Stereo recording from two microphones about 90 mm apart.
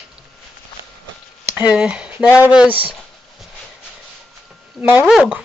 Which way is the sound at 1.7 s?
10° right (ahead or behind).